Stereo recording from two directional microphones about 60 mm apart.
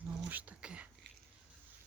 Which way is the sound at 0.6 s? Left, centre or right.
Centre.